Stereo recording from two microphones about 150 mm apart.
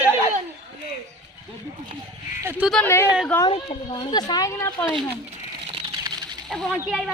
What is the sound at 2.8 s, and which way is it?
Speech, 15° left (ahead or behind).